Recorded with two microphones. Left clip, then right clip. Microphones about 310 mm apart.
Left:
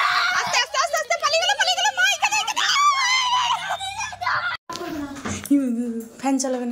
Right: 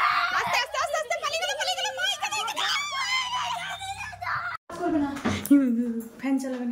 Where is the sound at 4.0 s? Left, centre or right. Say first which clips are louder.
Left 7 dB; left.